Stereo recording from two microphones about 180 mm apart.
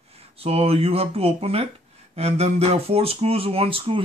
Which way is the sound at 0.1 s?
35° right (ahead or behind).